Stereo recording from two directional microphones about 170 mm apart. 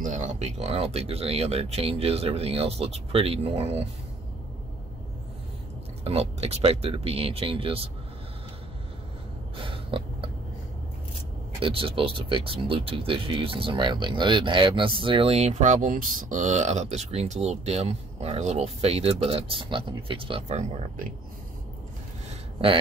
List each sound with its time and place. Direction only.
0.0 s speech: 45° right (ahead or behind)
6.0 s speech: 35° right (ahead or behind)
9.6 s a sound: 30° right (ahead or behind)
11.6 s speech: 30° right (ahead or behind)